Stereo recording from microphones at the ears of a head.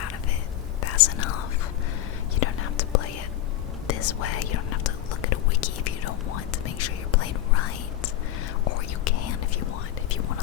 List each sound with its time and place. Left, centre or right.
0.8 s whispering: left